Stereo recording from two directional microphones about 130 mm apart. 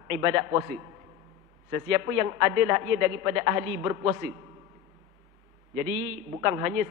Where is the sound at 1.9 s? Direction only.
20° right (ahead or behind).